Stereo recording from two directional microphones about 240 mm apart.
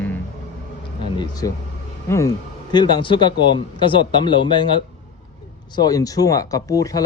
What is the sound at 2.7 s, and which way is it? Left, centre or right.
Speech, centre.